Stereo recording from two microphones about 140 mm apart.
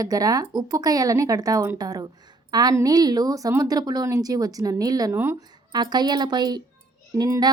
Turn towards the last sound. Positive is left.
turn(degrees=-25)  # may be behind; listen again after turning